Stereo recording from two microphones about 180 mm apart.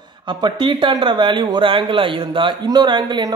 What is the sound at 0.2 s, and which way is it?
Speech, 25° right (ahead or behind).